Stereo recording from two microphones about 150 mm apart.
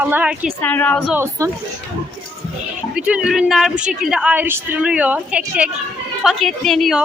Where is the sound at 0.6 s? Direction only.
10° left (ahead or behind).